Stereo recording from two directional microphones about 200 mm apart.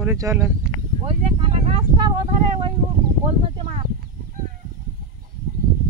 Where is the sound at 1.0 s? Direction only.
30° right (ahead or behind).